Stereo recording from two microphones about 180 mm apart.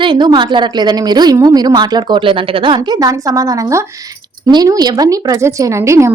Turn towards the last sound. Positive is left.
turn(degrees=-15)  # may be behind; listen again after turning